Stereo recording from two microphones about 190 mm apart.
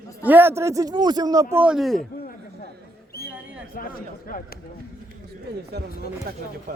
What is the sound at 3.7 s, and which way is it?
Speech, 50° left (ahead or behind).